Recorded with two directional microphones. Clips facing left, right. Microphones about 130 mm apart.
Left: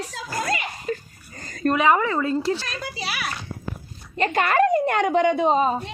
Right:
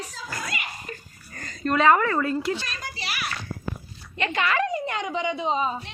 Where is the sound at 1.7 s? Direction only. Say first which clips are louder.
Right 1 dB; 15° left (ahead or behind).